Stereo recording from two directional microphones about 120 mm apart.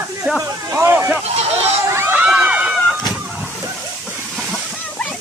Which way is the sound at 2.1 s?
10° right (ahead or behind).